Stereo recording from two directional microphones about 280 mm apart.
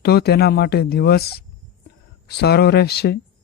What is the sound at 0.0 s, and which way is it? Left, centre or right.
Speech, left.